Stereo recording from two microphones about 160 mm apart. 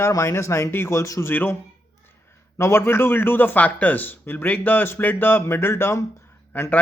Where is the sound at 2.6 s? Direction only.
15° left (ahead or behind).